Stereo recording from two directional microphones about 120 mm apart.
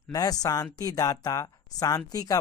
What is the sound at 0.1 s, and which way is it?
Speech, 30° left (ahead or behind).